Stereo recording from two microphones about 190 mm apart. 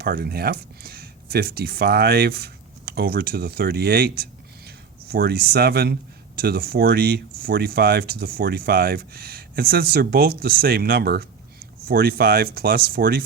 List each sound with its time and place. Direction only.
0.0 s speech: 55° right (ahead or behind)